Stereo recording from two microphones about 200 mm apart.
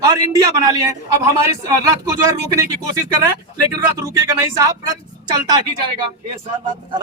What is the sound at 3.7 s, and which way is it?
Speech, 15° right (ahead or behind).